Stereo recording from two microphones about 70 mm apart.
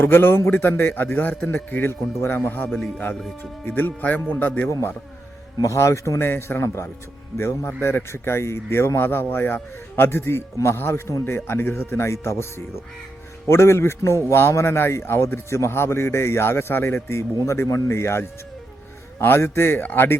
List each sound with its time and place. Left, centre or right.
0.0 s a man's voice: left
2.6 s speech: centre
3.7 s a man's voice: left
5.6 s a man's voice: left